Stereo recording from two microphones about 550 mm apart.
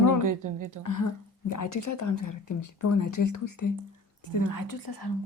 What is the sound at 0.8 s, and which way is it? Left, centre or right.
Speech, left.